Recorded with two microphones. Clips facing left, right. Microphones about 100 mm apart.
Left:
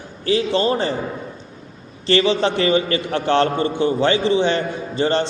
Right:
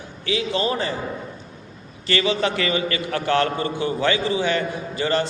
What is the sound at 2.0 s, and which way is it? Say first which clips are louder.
A man's voice: left 5 dB; 30° left (ahead or behind).